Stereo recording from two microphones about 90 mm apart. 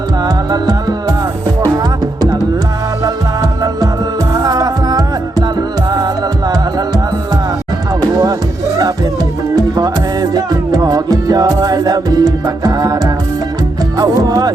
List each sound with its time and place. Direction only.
0.3 s music: 45° right (ahead or behind)
3.0 s music: 45° right (ahead or behind)
8.0 s music: 45° right (ahead or behind)
9.6 s music: 45° right (ahead or behind)
14.0 s music: 45° right (ahead or behind)